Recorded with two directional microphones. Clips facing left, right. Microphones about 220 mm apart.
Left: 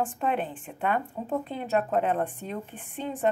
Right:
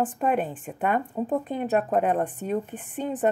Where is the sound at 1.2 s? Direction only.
45° right (ahead or behind).